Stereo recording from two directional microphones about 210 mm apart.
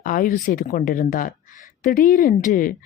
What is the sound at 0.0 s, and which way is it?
A woman's voice, 40° left (ahead or behind).